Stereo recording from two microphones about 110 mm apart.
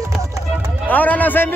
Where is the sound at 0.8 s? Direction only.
15° left (ahead or behind).